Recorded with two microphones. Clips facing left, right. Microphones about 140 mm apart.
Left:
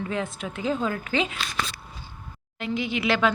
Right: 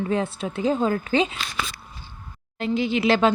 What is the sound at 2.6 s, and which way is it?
Speech, 30° right (ahead or behind).